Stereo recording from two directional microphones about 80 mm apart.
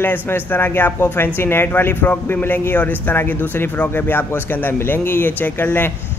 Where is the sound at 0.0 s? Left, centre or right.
Left.